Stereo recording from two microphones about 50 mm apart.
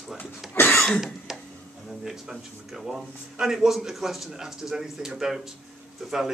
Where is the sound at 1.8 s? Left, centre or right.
Centre.